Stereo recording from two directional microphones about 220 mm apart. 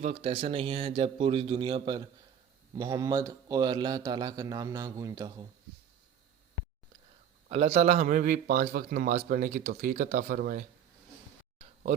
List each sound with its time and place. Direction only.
0.0 s a man's voice: 25° right (ahead or behind)
7.4 s a man's voice: 30° right (ahead or behind)
11.6 s a sound: 35° right (ahead or behind)